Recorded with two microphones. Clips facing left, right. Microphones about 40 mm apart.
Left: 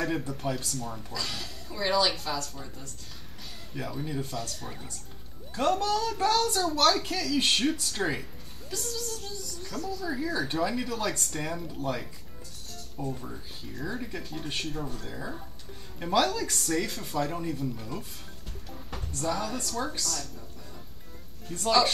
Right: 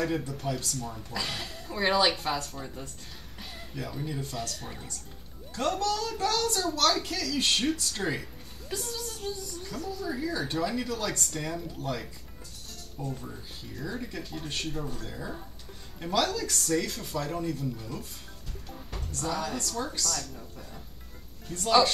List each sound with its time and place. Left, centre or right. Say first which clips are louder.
0.0 s speech: even; centre
1.1 s speech: right 5 dB; right
3.7 s speech: left 2 dB; centre
5.5 s speech: left 2 dB; centre
8.7 s speech: left 1 dB; centre
10.0 s speech: left 1 dB; centre
19.1 s speech: left 1 dB; centre
21.5 s speech: right 1 dB; centre